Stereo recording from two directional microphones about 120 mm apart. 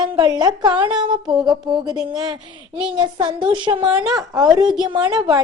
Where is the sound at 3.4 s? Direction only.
40° right (ahead or behind).